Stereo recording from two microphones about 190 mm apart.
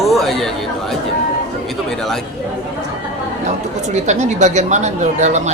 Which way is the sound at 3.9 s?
40° right (ahead or behind).